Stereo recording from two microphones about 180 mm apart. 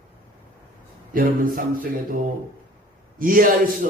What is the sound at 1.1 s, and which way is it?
Speech, 50° right (ahead or behind).